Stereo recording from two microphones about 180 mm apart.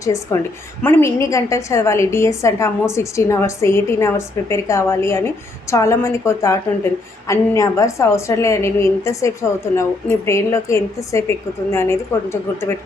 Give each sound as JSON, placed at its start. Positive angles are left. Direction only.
{"t": 0.0, "sound": "a woman's voice", "side_deg": 15}